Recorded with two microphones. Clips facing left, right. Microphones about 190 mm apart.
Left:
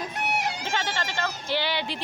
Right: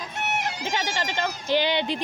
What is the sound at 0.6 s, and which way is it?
Speech, 15° right (ahead or behind).